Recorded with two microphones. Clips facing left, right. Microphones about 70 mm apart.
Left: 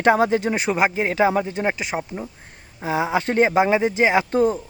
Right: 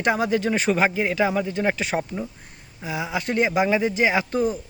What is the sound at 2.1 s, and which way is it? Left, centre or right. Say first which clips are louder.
Speech: right 1 dB; centre.